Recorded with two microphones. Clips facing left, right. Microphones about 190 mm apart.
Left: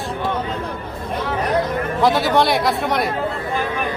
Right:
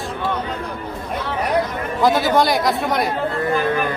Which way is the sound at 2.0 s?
Centre (ahead or behind).